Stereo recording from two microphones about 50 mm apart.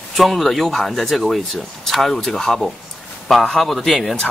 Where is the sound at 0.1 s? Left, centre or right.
Centre.